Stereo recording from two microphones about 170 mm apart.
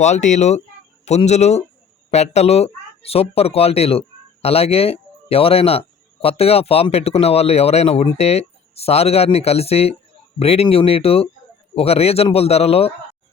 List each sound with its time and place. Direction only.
0.0 s speech: 45° left (ahead or behind)